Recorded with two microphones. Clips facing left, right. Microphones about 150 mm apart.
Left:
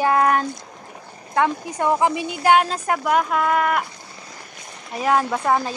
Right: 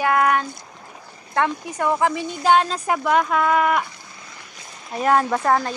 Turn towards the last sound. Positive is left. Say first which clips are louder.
# right 1 dB
turn(degrees=5)  # may be behind; listen again after turning